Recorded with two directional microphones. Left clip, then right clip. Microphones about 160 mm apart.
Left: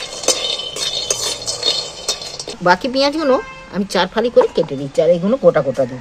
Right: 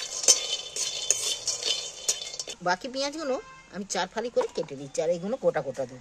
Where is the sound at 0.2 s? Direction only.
20° right (ahead or behind).